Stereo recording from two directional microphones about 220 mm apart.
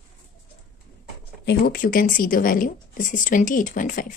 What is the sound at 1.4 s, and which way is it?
Speech, 40° left (ahead or behind).